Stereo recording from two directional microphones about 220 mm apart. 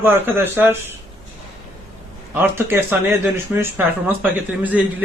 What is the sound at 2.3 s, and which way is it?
A man's voice, 10° right (ahead or behind).